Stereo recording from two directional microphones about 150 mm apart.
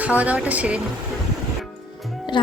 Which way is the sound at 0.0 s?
10° right (ahead or behind).